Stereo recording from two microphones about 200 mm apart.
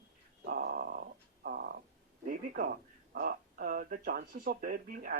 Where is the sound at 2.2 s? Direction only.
45° right (ahead or behind).